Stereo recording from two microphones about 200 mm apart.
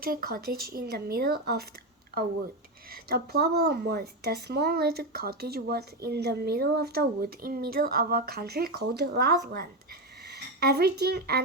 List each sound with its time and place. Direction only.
0.0 s speech: 50° right (ahead or behind)
2.9 s speech: 50° right (ahead or behind)